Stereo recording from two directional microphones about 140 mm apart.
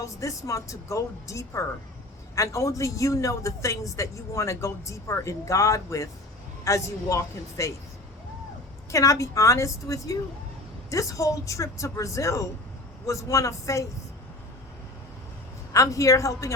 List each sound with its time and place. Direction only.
0.0 s a man's voice: 20° left (ahead or behind)
8.9 s a man's voice: 20° left (ahead or behind)
15.7 s a man's voice: 25° left (ahead or behind)